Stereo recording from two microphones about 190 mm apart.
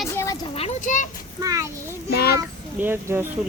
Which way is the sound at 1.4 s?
15° right (ahead or behind).